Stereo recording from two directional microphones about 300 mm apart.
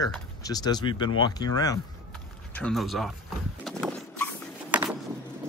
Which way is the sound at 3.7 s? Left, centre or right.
Centre.